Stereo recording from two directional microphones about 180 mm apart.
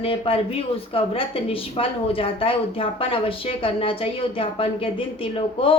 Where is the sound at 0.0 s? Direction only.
30° left (ahead or behind).